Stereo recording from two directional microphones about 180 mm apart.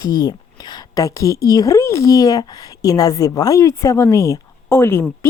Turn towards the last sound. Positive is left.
turn(degrees=15)  # may be behind; listen again after turning